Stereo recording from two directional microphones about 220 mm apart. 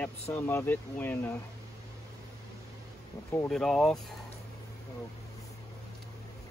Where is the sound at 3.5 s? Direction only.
Centre (ahead or behind).